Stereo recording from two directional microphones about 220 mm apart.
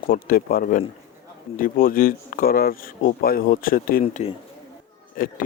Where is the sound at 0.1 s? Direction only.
40° left (ahead or behind).